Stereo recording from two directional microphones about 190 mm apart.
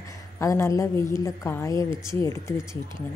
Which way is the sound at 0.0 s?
15° left (ahead or behind).